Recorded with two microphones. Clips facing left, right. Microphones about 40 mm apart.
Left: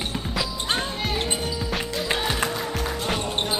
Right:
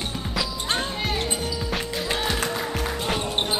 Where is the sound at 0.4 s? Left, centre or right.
Centre.